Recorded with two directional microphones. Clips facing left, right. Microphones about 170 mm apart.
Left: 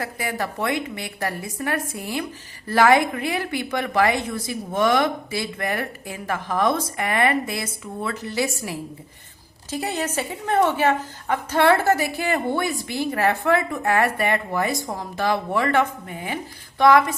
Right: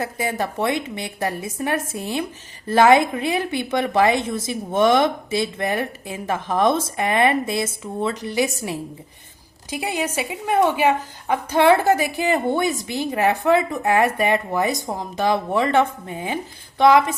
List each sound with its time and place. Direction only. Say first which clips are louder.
0.0 s a woman's voice: right 3 dB; 20° right (ahead or behind)